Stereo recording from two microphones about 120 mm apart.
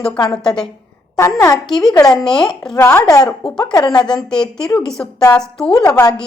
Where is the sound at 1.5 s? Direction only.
5° left (ahead or behind).